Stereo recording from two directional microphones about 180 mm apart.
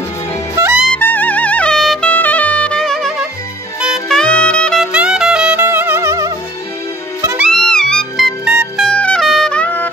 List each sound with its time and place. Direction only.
0.6 s music: 15° right (ahead or behind)
0.9 s music: 10° left (ahead or behind)
3.8 s saxophone: centre (ahead or behind)
4.9 s music: 5° right (ahead or behind)
7.4 s music: 5° left (ahead or behind)